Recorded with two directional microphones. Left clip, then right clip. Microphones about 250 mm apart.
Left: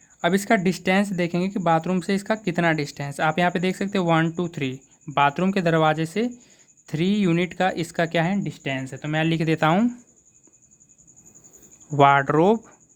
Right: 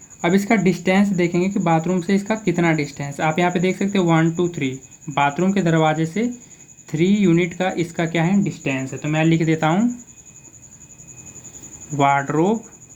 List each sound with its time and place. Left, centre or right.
0.2 s speech: left
11.9 s speech: left